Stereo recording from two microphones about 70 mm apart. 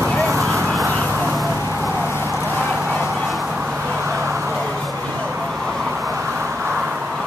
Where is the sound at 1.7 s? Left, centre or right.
Right.